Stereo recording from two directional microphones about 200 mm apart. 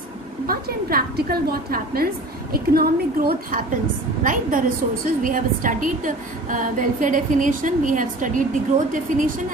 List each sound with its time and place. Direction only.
0.4 s a woman's voice: 50° right (ahead or behind)